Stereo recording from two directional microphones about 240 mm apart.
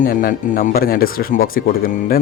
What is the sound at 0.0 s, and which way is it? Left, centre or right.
Speech, left.